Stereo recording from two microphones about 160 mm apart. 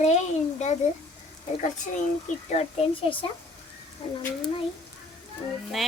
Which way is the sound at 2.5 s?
35° left (ahead or behind).